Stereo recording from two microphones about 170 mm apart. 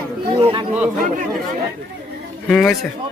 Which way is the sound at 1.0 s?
50° right (ahead or behind).